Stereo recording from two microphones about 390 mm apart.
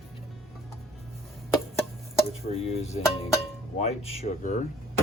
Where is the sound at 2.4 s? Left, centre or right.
Centre.